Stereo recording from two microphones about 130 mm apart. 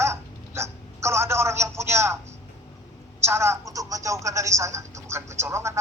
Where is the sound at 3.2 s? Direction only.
20° right (ahead or behind).